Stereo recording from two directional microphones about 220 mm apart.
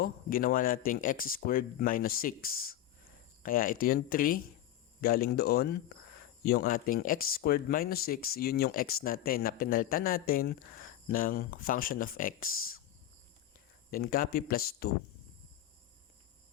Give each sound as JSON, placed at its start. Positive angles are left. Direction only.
{"t": 0.0, "sound": "speech", "side_deg": 40}
{"t": 13.9, "sound": "speech", "side_deg": 40}